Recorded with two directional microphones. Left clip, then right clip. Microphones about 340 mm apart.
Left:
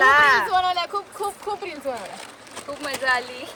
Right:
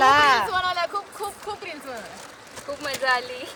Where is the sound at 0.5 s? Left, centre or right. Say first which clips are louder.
Left 3 dB; centre.